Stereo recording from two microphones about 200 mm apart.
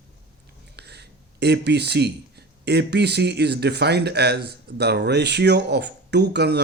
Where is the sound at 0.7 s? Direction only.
55° right (ahead or behind).